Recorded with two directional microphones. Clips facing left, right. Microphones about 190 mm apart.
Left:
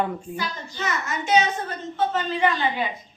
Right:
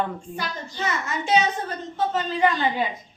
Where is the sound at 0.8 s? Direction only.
30° right (ahead or behind).